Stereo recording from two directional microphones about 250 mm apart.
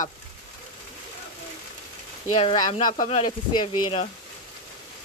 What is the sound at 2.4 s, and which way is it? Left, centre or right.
Speech, centre.